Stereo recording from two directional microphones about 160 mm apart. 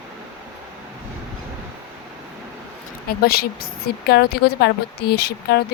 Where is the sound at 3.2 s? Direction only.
75° left (ahead or behind); by 5.6 s 90° left.